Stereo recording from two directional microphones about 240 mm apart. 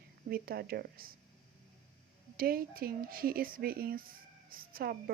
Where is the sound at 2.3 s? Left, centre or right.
Right.